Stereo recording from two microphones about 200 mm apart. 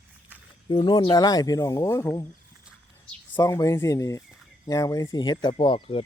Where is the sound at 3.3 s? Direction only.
15° left (ahead or behind).